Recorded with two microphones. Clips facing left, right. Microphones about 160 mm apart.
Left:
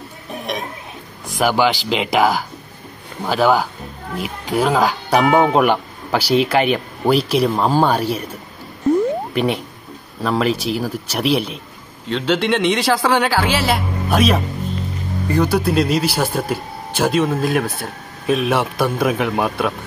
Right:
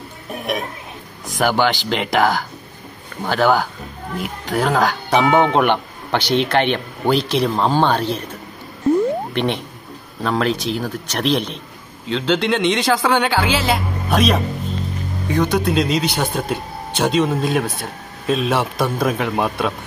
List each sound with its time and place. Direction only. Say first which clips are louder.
1.4 s speech: left 1 dB; 5° left (ahead or behind)